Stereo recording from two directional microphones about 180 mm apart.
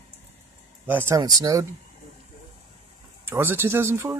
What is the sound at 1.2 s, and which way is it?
Speech, 20° right (ahead or behind).